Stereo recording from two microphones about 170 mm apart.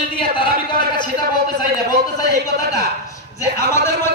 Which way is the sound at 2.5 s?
75° right (ahead or behind).